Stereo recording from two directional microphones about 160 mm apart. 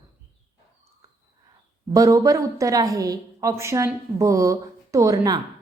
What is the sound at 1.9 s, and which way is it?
A woman's voice, 20° right (ahead or behind).